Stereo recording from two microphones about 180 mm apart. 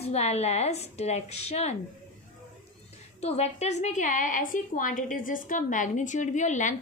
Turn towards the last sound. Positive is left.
turn(degrees=40)  # may be behind; listen again after turning